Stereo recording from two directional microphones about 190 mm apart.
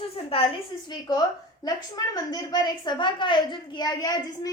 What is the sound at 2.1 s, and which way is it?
A woman's voice, 20° left (ahead or behind).